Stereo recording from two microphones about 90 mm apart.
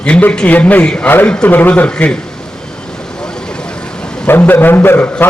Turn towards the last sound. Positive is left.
turn(degrees=20)  # may be behind; listen again after turning